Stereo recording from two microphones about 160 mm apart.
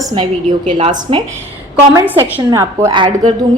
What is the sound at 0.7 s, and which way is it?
Speech, 35° right (ahead or behind).